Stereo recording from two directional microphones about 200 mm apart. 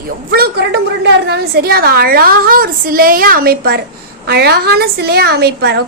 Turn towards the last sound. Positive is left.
turn(degrees=-55)  # may be behind; listen again after turning